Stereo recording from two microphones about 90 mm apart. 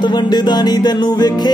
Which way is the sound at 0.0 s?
55° left (ahead or behind).